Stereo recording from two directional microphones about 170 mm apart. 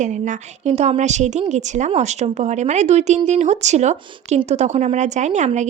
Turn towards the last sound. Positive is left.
turn(degrees=-45)  # may be behind; listen again after turning